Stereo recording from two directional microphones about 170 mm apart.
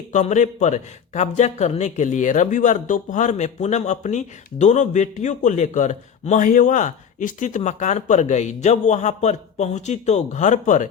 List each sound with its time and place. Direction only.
0.1 s a man's voice: 45° left (ahead or behind)